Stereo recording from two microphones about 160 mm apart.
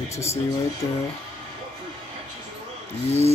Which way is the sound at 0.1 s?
20° left (ahead or behind).